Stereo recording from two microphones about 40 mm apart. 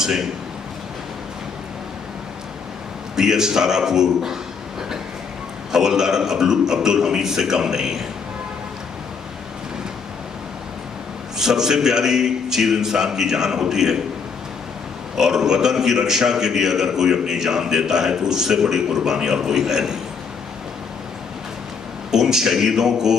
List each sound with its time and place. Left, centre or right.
0.0 s a man's voice: centre
3.2 s a man's voice: centre
5.7 s a man's voice: centre
11.3 s a man's voice: centre
15.1 s a man's voice: centre
22.1 s a man's voice: centre